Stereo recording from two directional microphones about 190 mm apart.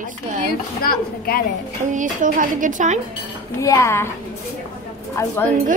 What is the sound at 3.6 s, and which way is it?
Speech, 15° left (ahead or behind).